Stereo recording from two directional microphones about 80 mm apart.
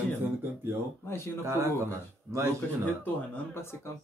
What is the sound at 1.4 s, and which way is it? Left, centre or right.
Speech, right.